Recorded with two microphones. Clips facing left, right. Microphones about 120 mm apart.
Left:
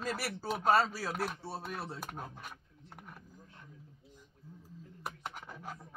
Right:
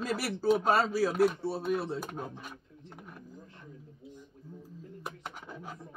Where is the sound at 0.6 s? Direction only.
Centre (ahead or behind).